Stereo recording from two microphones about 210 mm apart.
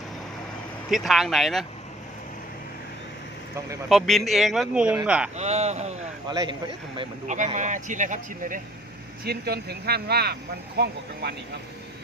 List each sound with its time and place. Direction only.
0.9 s speech: centre (ahead or behind)
3.8 s speech: centre (ahead or behind)
5.4 s speech: 30° right (ahead or behind)
6.2 s speech: 20° right (ahead or behind); by 8.6 s 40° right (ahead or behind)
9.2 s speech: 50° right (ahead or behind)